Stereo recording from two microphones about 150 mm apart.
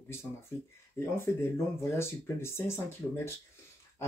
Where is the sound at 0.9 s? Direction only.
15° left (ahead or behind).